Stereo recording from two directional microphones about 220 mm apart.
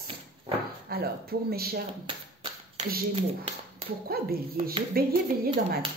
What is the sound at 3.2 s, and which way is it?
Speech, 25° right (ahead or behind).